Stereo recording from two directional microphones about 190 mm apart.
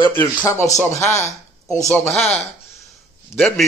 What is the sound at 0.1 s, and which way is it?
Speech, 10° left (ahead or behind).